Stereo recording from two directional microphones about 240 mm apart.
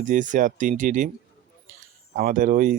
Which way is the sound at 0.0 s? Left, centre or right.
Right.